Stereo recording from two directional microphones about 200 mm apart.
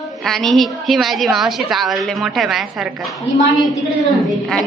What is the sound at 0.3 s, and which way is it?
A woman's voice, centre (ahead or behind).